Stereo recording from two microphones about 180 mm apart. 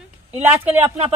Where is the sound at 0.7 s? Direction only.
10° right (ahead or behind).